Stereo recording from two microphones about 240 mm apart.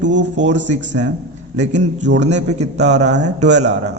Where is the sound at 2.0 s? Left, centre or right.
Right.